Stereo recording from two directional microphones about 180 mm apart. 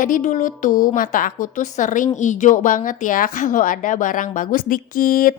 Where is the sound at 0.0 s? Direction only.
45° left (ahead or behind).